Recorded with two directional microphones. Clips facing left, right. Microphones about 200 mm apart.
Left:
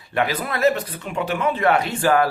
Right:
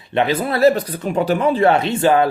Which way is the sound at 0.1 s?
25° right (ahead or behind).